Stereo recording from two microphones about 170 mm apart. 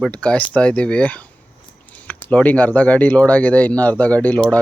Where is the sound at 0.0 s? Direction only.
5° left (ahead or behind).